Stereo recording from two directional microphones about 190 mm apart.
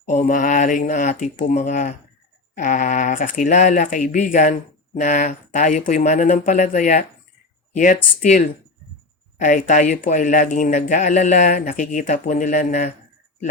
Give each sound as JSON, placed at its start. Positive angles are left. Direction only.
{"t": 0.1, "sound": "speech", "side_deg": 40}
{"t": 8.2, "sound": "speech", "side_deg": 40}